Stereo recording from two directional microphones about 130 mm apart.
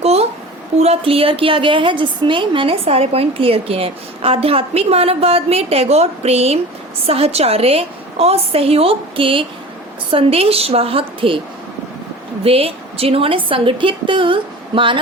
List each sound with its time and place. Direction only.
0.0 s a sound: 55° right (ahead or behind)
0.8 s a woman's voice: 50° right (ahead or behind)
12.5 s a woman's voice: 50° right (ahead or behind)